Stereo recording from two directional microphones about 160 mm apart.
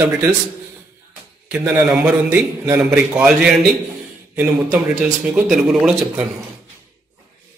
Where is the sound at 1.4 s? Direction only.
10° right (ahead or behind).